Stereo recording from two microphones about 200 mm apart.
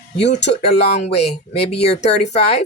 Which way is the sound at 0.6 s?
30° left (ahead or behind).